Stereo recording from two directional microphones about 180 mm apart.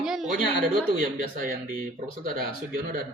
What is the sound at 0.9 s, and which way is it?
A man's voice, 50° right (ahead or behind).